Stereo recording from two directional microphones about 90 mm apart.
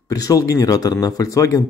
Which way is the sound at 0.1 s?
40° left (ahead or behind).